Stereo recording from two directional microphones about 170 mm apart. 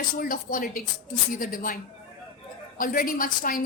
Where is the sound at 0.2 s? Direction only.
55° left (ahead or behind).